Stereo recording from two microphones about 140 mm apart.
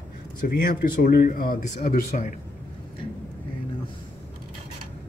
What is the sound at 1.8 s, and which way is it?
Speech, 70° left (ahead or behind).